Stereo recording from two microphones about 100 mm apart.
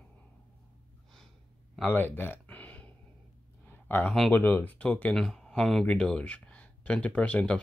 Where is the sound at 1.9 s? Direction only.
20° left (ahead or behind).